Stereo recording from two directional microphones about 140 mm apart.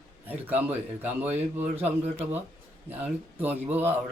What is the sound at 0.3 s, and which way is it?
Speech, 15° right (ahead or behind).